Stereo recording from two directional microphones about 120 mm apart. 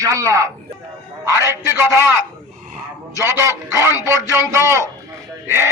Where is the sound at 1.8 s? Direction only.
20° right (ahead or behind).